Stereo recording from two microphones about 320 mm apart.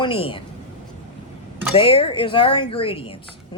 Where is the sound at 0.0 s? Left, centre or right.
Centre.